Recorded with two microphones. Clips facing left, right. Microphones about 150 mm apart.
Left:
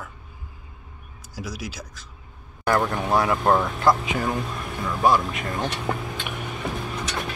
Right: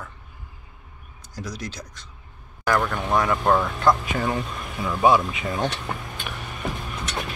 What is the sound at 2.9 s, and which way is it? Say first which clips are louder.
Speech: left 1 dB; 10° left (ahead or behind).